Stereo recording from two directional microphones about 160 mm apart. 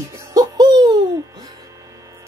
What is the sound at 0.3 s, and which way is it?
Music, 25° right (ahead or behind).